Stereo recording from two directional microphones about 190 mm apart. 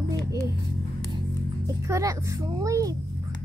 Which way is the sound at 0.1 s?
20° right (ahead or behind).